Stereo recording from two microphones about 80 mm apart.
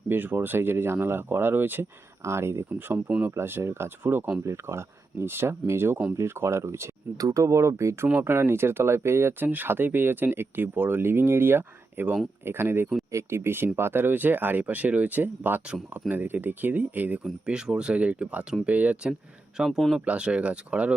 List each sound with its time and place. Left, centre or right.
0.1 s speech: right
19.5 s speech: centre
20.1 s speech: centre